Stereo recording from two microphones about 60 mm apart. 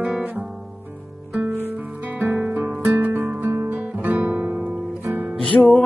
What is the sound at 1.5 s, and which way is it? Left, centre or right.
Music, right.